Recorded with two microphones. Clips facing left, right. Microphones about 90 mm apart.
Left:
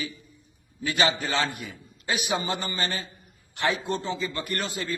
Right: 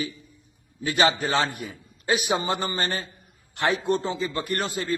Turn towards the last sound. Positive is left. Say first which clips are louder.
# right 3 dB
turn(degrees=-50)  # may be behind; listen again after turning